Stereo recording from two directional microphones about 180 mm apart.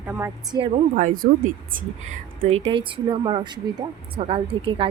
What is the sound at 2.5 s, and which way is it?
A woman's voice, 30° right (ahead or behind).